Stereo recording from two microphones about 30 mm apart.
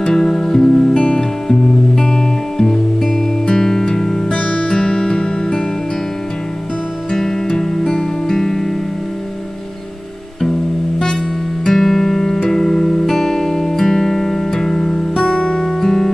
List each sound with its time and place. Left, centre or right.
0.1 s music: centre
0.9 s music: left
1.5 s music: centre
4.3 s music: left
4.6 s music: left
7.6 s music: centre
11.6 s music: centre; by 15.8 s left
15.8 s music: centre